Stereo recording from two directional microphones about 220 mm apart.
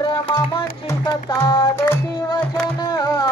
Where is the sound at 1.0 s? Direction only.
20° left (ahead or behind).